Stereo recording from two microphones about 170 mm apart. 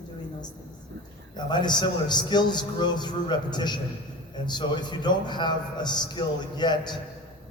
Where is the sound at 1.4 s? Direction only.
25° left (ahead or behind).